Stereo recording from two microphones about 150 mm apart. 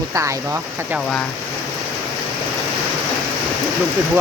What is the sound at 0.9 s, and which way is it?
Speech, 5° left (ahead or behind).